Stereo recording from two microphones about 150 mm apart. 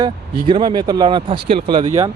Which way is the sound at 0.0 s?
30° right (ahead or behind).